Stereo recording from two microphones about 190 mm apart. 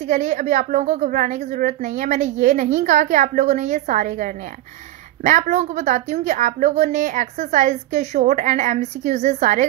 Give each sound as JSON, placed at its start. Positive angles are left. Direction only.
{"t": 0.1, "sound": "a woman's voice", "side_deg": -40}